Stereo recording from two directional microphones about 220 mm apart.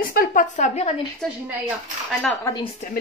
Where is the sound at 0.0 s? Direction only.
40° left (ahead or behind).